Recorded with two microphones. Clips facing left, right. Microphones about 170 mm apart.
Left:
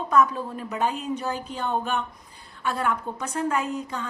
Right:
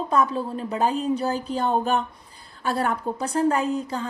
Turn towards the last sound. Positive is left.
turn(degrees=-35)  # may be behind; listen again after turning